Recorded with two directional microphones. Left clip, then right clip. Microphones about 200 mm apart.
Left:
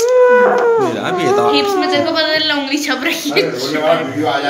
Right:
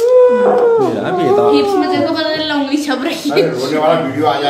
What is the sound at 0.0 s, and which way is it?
Howl, centre (ahead or behind).